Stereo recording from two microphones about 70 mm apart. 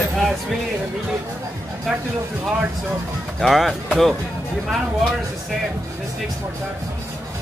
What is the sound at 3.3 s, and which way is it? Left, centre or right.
Speech, centre.